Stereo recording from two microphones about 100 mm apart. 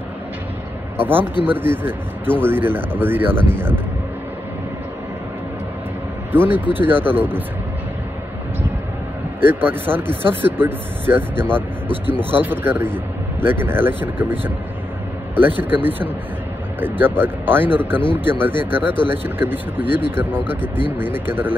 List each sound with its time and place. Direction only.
0.9 s speech: 20° right (ahead or behind)
6.3 s speech: 20° right (ahead or behind)
9.4 s speech: 20° right (ahead or behind)